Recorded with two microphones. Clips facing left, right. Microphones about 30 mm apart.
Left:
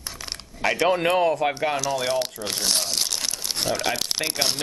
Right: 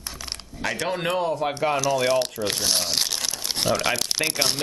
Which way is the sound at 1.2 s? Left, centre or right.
Left.